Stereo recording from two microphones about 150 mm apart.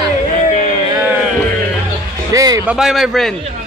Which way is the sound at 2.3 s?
25° right (ahead or behind).